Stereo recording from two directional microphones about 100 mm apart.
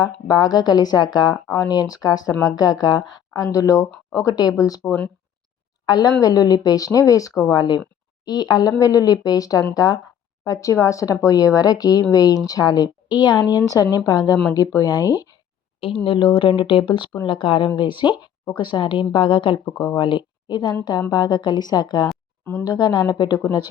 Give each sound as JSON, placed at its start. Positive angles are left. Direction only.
{"t": 0.0, "sound": "speech", "side_deg": 40}
{"t": 5.8, "sound": "a woman's voice", "side_deg": 45}
{"t": 16.0, "sound": "a woman's voice", "side_deg": 55}